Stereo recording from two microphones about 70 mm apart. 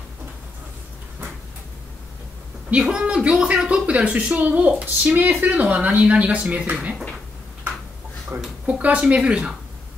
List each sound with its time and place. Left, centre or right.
2.8 s speech: centre
8.3 s a sound: right
8.6 s speech: centre